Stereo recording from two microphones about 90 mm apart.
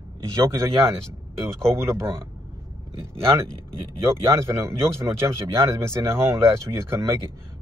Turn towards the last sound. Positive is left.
turn(degrees=-30)  # may be behind; listen again after turning